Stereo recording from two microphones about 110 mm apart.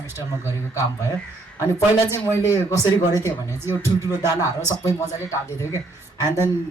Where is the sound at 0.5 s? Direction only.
30° left (ahead or behind).